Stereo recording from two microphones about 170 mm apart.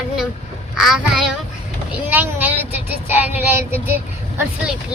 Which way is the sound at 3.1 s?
10° right (ahead or behind).